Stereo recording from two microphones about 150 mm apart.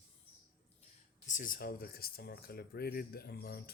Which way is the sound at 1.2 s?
60° left (ahead or behind).